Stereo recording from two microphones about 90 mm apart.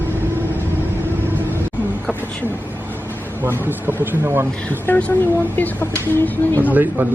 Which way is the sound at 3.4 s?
25° right (ahead or behind).